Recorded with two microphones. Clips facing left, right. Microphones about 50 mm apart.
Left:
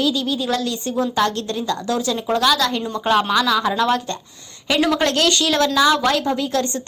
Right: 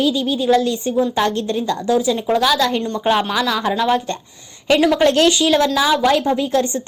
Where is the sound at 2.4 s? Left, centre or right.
Right.